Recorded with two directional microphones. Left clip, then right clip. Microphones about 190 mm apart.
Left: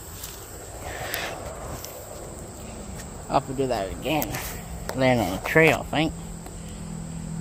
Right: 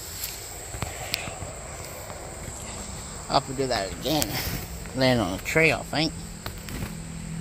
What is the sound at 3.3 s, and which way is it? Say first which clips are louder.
Speech: even; 10° left (ahead or behind).